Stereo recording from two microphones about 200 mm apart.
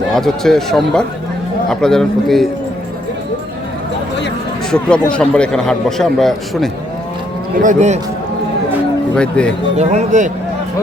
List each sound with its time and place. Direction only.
0.1 s a man's voice: centre (ahead or behind)
4.7 s a man's voice: 5° left (ahead or behind)
7.6 s speech: 35° right (ahead or behind)
9.1 s a man's voice: 5° left (ahead or behind)
9.7 s speech: 35° right (ahead or behind)